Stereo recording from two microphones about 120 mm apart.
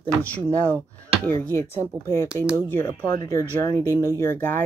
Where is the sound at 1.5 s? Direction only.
20° left (ahead or behind).